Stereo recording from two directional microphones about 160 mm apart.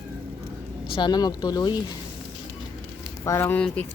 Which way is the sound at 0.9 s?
25° left (ahead or behind).